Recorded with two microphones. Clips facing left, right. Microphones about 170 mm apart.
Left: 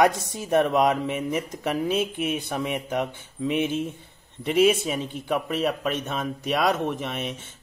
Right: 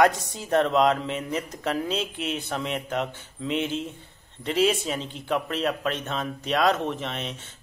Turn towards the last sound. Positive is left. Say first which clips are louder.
# left 2 dB
turn(degrees=10)  # may be behind; listen again after turning